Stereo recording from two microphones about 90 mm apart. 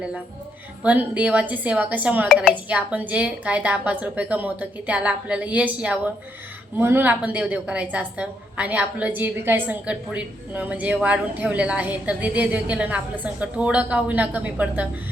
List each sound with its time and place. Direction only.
0.8 s a woman's voice: 15° right (ahead or behind)
6.7 s a woman's voice: 25° right (ahead or behind)